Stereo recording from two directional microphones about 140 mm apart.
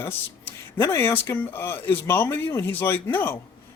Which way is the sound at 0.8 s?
15° left (ahead or behind).